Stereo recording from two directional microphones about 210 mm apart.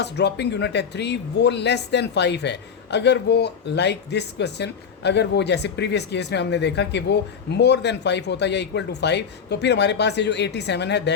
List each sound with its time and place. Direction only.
0.0 s speech: 55° left (ahead or behind)